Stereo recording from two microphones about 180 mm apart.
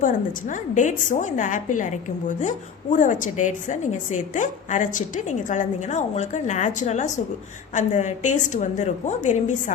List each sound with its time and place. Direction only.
0.0 s a woman's voice: 45° left (ahead or behind)